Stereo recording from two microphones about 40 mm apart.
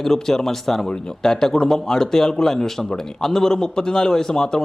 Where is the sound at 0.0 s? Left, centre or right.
Centre.